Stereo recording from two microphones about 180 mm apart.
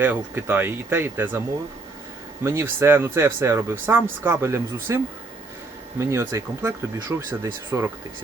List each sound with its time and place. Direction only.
0.0 s speech: 10° right (ahead or behind)
2.4 s speech: 15° right (ahead or behind)
6.0 s speech: 15° right (ahead or behind)